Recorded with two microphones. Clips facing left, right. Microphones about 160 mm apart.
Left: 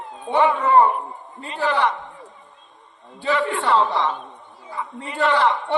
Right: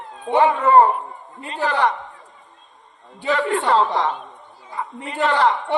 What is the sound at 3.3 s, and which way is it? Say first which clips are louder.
Speech: right 1 dB; 45° right (ahead or behind).